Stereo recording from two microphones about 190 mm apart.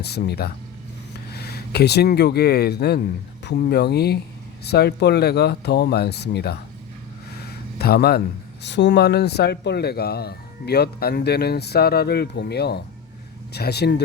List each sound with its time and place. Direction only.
0.0 s speech: 60° left (ahead or behind)
7.3 s a sound: 55° left (ahead or behind)
8.6 s speech: 65° left (ahead or behind)